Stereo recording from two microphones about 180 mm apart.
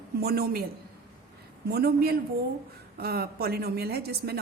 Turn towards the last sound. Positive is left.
turn(degrees=-60)  # may be behind; listen again after turning